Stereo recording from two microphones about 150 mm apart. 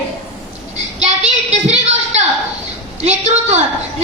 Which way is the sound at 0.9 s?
50° right (ahead or behind).